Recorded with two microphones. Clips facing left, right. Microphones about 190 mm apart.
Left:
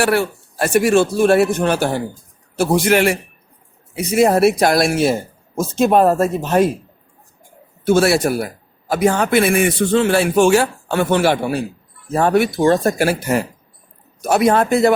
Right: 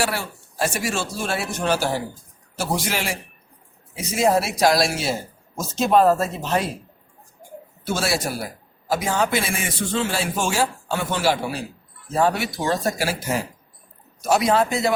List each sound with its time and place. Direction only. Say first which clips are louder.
0.0 s a man's voice: left 9 dB; 60° left (ahead or behind)
7.9 s a man's voice: left 10 dB; 60° left (ahead or behind)